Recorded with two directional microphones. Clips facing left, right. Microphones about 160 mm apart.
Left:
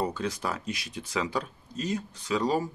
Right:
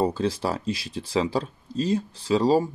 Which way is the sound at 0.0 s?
30° right (ahead or behind).